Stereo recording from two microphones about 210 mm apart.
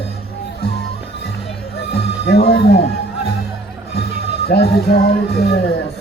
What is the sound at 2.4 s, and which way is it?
Speech, 50° left (ahead or behind).